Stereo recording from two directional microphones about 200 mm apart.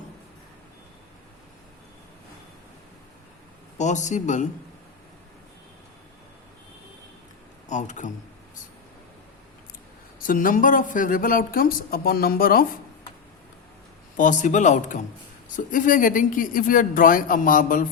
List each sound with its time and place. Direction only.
3.8 s speech: 35° left (ahead or behind)
7.7 s speech: 35° left (ahead or behind)
10.2 s speech: 40° left (ahead or behind)
14.2 s speech: 40° left (ahead or behind)